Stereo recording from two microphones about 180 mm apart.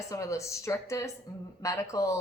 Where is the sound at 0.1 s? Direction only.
15° left (ahead or behind).